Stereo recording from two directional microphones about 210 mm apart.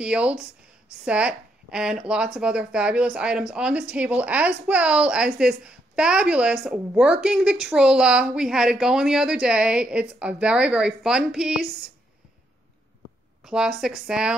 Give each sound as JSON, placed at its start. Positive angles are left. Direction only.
{"t": 0.0, "sound": "speech", "side_deg": -5}
{"t": 13.4, "sound": "speech", "side_deg": 0}